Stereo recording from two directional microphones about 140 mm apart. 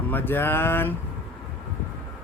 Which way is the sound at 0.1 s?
15° left (ahead or behind).